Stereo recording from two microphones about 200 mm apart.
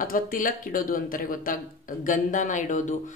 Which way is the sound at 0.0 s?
45° left (ahead or behind).